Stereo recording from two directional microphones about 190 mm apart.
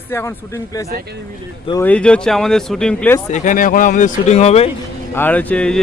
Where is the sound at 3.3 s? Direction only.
45° left (ahead or behind).